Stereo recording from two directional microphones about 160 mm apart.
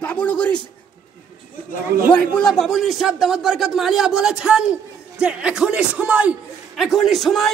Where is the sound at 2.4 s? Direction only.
Centre (ahead or behind).